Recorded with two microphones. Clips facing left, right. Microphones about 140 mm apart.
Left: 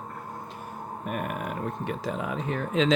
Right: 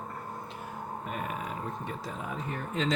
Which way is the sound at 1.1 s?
60° left (ahead or behind).